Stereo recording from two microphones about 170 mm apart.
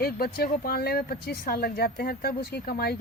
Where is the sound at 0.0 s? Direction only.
65° left (ahead or behind).